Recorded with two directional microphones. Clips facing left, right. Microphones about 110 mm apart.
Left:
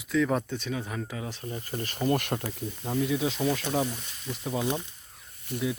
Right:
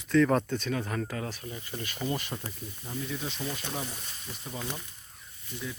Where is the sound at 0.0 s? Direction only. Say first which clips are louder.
Right 2 dB; 5° left (ahead or behind).